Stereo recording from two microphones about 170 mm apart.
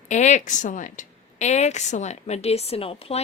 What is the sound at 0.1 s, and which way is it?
A woman's voice, 45° left (ahead or behind).